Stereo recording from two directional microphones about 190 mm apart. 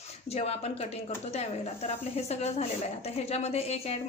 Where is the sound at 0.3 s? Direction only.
35° left (ahead or behind).